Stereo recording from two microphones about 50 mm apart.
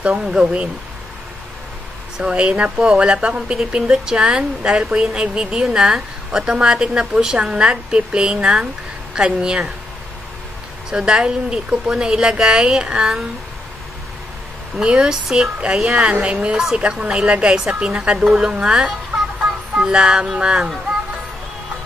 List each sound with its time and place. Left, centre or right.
0.2 s speech: centre
2.1 s speech: centre
10.9 s speech: centre
14.8 s speech: centre